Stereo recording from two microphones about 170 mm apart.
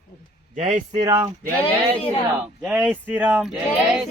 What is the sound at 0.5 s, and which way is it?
Speech, 45° right (ahead or behind).